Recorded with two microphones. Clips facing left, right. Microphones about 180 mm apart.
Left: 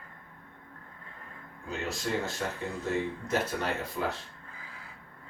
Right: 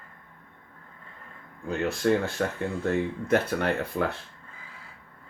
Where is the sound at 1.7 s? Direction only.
60° right (ahead or behind).